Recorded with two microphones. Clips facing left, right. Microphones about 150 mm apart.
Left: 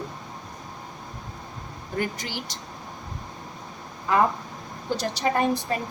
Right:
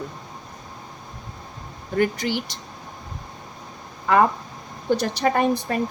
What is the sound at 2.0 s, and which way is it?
Speech, 65° right (ahead or behind).